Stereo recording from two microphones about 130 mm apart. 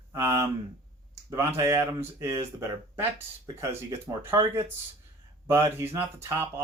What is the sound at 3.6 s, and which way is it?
Speech, 20° right (ahead or behind).